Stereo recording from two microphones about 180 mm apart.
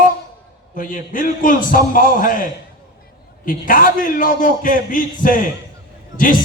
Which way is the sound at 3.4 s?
50° left (ahead or behind).